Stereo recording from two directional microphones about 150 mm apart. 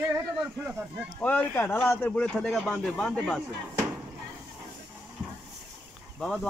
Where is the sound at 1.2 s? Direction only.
10° left (ahead or behind).